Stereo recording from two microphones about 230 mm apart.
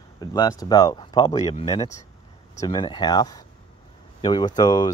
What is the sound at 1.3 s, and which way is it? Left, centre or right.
Speech, left.